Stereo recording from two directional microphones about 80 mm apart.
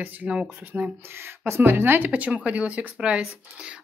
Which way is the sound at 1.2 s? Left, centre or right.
Right.